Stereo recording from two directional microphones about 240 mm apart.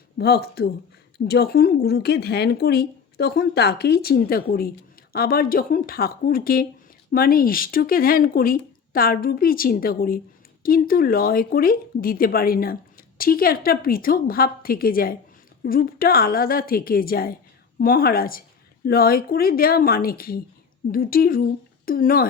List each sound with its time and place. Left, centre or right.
0.2 s speech: left